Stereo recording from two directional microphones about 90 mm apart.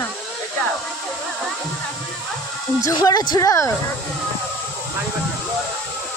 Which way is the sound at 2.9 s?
45° left (ahead or behind).